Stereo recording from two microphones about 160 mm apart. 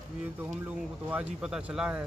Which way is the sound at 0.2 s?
10° right (ahead or behind).